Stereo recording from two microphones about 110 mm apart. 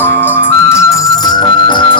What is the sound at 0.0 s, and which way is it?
Music, 20° left (ahead or behind).